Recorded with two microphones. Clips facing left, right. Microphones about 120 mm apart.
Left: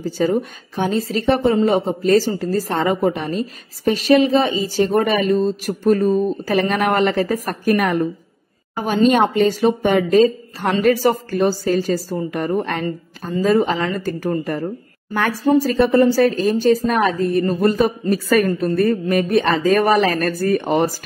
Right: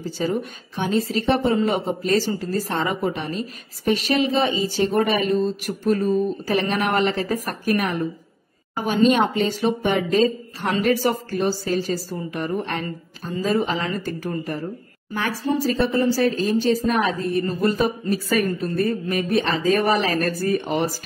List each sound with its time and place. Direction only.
0.2 s a woman's voice: 40° left (ahead or behind)
13.6 s a woman's voice: 35° left (ahead or behind)
18.3 s speech: 60° left (ahead or behind)